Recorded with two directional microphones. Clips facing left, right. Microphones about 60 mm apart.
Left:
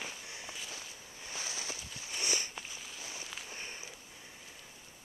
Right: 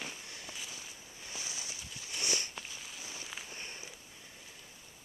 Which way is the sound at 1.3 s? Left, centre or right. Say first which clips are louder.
Left 3 dB; left.